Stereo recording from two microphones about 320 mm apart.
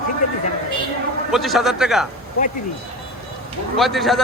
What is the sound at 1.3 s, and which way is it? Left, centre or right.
Speech, centre.